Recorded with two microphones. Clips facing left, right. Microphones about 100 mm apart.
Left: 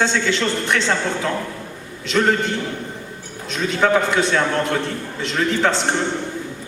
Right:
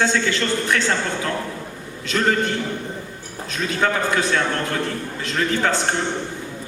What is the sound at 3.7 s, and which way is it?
A man's voice, 30° left (ahead or behind).